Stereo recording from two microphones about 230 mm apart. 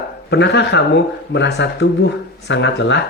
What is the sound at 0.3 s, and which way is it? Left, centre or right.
Speech, left.